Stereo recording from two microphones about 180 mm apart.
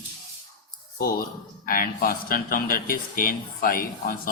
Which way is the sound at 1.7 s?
50° left (ahead or behind).